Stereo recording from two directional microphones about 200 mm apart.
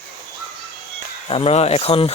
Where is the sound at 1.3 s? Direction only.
30° left (ahead or behind).